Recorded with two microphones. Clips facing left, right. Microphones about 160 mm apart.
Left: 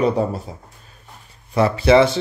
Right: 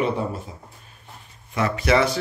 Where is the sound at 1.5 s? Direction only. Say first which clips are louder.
Left 6 dB; 30° left (ahead or behind).